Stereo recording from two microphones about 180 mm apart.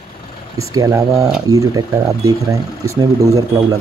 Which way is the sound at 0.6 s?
20° right (ahead or behind).